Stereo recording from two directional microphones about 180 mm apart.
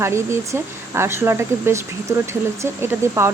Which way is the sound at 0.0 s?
15° right (ahead or behind).